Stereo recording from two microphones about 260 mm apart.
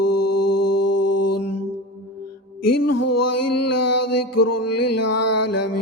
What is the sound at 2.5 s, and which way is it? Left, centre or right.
Music, left.